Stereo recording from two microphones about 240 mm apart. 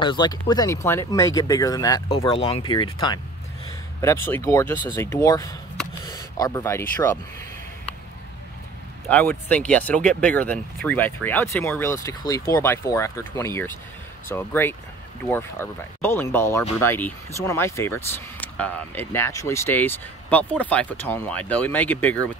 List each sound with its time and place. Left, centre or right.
0.0 s speech: centre
9.1 s speech: centre